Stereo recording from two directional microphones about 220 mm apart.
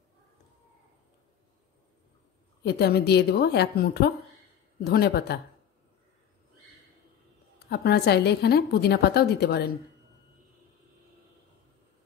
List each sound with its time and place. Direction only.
2.6 s a woman's voice: 50° left (ahead or behind)
7.5 s a woman's voice: 45° left (ahead or behind)